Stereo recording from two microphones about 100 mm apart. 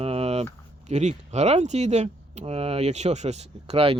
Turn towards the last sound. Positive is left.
turn(degrees=-80)